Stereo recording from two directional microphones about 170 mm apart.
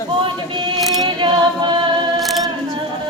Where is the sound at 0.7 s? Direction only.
Centre (ahead or behind).